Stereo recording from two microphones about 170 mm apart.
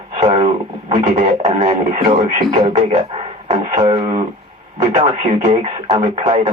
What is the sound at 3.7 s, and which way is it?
Speech, 35° right (ahead or behind).